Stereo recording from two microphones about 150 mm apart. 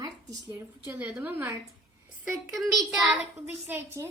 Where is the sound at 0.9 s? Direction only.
10° right (ahead or behind).